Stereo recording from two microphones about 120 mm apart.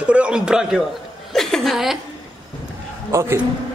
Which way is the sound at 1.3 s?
5° left (ahead or behind).